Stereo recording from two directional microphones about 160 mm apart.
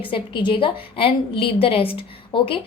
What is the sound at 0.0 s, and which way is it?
A woman's voice, 30° left (ahead or behind).